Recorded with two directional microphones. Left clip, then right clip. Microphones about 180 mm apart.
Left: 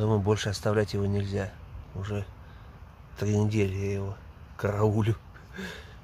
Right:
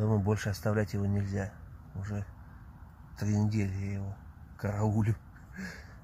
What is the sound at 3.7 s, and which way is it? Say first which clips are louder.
Speech: left 11 dB; 20° left (ahead or behind).